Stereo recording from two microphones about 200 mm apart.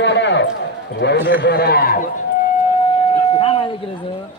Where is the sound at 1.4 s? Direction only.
50° left (ahead or behind).